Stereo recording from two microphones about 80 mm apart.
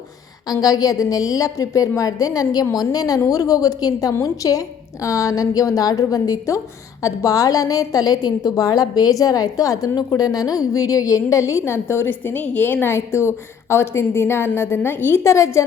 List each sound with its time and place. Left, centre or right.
0.4 s a woman's voice: left